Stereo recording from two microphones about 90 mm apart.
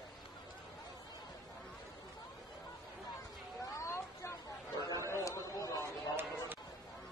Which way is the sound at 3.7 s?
35° left (ahead or behind).